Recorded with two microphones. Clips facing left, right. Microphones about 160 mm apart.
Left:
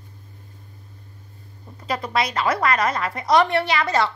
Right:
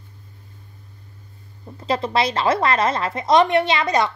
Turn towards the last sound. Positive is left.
turn(degrees=-20)  # may be behind; listen again after turning